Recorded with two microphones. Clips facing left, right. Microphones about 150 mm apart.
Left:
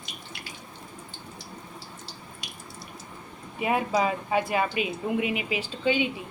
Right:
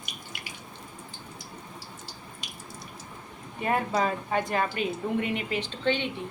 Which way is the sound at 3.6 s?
5° left (ahead or behind).